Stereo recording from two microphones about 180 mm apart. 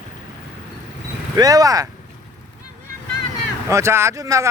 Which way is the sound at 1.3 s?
20° right (ahead or behind).